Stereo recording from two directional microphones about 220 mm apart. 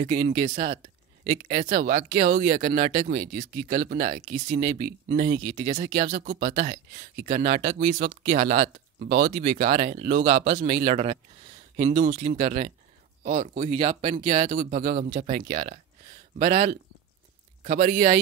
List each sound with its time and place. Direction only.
0.0 s speech: 30° right (ahead or behind)